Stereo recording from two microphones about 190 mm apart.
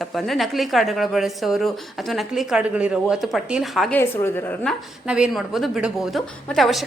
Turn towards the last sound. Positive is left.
turn(degrees=0)  # may be behind; listen again after turning